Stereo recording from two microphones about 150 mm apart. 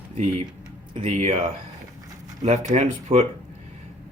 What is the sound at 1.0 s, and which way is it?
Speech, 50° right (ahead or behind).